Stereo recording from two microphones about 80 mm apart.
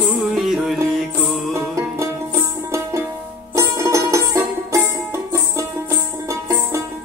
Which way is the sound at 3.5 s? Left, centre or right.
Right.